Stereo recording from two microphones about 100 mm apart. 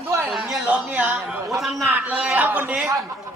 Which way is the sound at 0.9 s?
15° right (ahead or behind).